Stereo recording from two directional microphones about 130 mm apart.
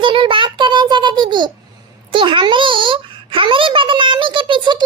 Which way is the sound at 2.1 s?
40° right (ahead or behind).